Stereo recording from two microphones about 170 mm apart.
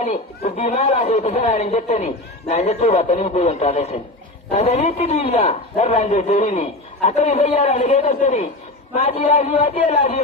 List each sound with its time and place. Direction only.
0.0 s a man's voice: 40° left (ahead or behind)